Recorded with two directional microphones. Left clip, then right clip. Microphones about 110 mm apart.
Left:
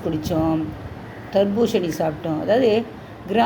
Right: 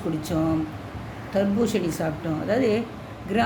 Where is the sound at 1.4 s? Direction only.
20° left (ahead or behind).